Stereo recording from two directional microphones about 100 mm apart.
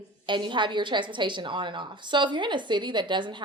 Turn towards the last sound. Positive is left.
turn(degrees=-50)  # may be behind; listen again after turning